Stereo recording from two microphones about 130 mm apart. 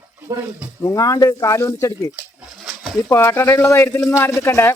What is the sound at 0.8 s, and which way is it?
Speech, 25° left (ahead or behind).